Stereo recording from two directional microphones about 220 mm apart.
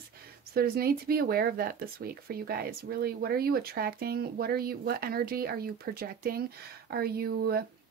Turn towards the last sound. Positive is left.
turn(degrees=-45)  # may be behind; listen again after turning